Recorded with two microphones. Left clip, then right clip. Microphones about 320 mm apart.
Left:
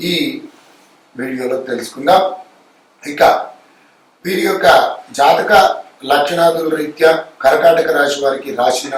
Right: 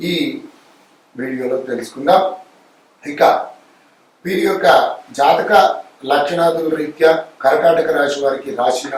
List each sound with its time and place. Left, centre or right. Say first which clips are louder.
1.1 s speech: left 1 dB; centre